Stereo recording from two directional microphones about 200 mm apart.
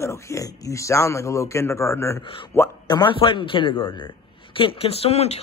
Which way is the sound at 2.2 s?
25° left (ahead or behind).